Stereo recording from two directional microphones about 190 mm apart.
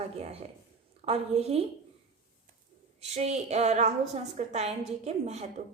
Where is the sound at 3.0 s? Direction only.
35° right (ahead or behind).